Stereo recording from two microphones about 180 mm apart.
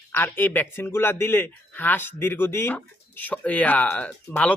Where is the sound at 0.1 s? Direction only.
10° left (ahead or behind).